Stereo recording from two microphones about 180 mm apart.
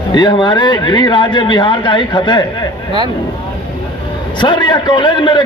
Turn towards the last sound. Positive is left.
turn(degrees=25)  # may be behind; listen again after turning